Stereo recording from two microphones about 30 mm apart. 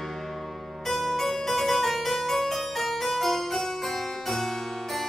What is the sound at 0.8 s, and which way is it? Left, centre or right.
Harpsichord, centre.